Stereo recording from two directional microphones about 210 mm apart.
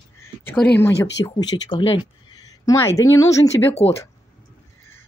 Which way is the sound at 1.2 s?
15° left (ahead or behind).